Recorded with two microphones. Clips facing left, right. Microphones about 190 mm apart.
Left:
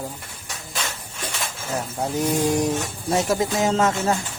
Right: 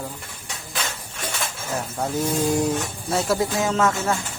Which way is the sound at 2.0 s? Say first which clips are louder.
Left 1 dB; 15° left (ahead or behind).